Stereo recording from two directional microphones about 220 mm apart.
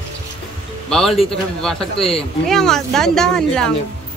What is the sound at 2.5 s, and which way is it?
Speech, centre (ahead or behind).